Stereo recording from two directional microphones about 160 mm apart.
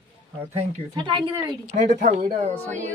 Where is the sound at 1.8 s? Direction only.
50° right (ahead or behind).